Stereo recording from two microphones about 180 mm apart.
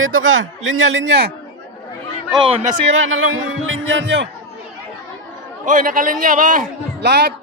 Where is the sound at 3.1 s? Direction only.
90° right.